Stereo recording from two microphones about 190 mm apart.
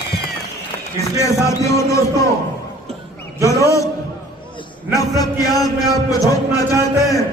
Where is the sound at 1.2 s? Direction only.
15° left (ahead or behind).